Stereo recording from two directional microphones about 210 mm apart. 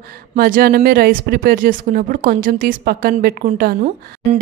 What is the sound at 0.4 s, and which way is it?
A woman's voice, 45° right (ahead or behind).